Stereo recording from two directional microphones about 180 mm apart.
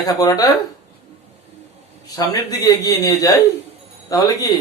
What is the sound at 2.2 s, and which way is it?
A man's voice, 20° left (ahead or behind).